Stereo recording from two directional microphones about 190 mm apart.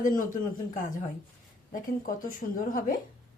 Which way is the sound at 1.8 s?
45° left (ahead or behind).